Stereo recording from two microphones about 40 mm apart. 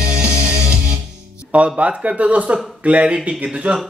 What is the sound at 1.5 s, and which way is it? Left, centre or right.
Speech, right.